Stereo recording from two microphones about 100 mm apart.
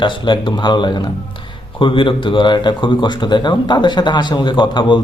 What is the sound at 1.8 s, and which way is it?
Speech, 60° left (ahead or behind).